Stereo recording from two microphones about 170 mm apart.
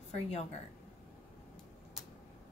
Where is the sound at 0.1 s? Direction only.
40° left (ahead or behind).